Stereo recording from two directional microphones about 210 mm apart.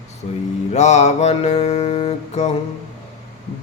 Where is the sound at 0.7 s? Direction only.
35° left (ahead or behind).